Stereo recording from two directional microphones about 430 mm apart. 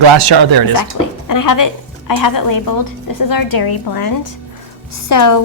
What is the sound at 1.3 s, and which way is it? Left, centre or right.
A woman's voice, left.